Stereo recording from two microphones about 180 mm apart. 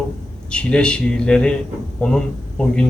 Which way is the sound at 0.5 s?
5° left (ahead or behind).